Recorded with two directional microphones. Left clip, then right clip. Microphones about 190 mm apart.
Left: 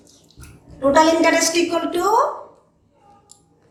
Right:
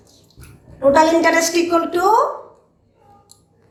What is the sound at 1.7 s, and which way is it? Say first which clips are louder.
Speech: right 3 dB; 40° right (ahead or behind).